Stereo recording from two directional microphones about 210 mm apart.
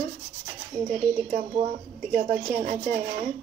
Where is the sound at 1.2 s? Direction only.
25° right (ahead or behind).